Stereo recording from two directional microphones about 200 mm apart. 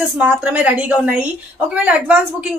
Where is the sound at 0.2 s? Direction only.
5° right (ahead or behind).